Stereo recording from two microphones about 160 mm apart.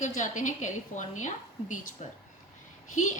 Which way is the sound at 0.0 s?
50° left (ahead or behind).